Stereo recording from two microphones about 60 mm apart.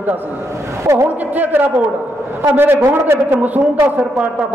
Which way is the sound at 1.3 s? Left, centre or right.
Right.